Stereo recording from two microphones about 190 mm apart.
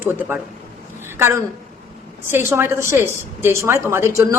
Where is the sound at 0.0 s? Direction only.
10° right (ahead or behind).